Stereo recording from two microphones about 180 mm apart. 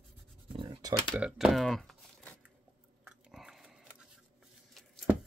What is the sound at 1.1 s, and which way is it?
Typing, 5° right (ahead or behind).